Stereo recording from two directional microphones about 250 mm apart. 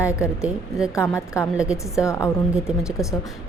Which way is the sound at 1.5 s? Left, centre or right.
Centre.